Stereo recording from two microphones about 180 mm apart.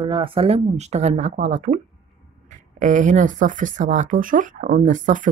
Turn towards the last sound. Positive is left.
turn(degrees=-45)  # may be behind; listen again after turning